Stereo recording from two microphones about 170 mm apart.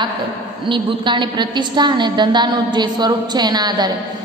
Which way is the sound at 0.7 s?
30° right (ahead or behind).